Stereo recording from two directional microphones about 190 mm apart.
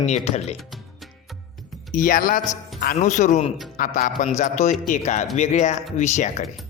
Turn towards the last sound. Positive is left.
turn(degrees=40)  # may be behind; listen again after turning